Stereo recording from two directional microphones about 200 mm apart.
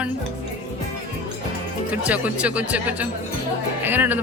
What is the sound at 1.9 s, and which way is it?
Music, 5° right (ahead or behind).